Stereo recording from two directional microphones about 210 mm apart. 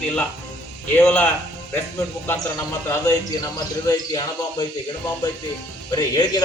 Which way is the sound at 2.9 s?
15° left (ahead or behind).